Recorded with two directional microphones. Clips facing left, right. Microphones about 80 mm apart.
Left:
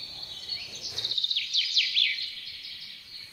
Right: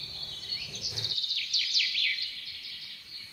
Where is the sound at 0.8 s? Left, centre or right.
Centre.